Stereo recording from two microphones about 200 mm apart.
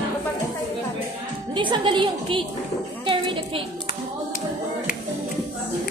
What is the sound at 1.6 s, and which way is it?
Speech, 25° right (ahead or behind).